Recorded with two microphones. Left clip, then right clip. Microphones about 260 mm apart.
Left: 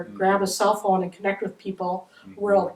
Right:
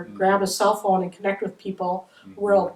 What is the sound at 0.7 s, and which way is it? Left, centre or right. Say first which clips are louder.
Speech: right 1 dB; left.